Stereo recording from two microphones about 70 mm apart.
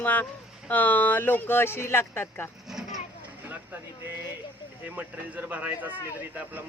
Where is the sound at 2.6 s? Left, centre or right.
Centre.